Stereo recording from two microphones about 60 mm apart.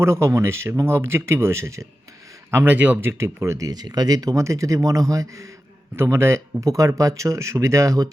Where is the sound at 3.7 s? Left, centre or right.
Right.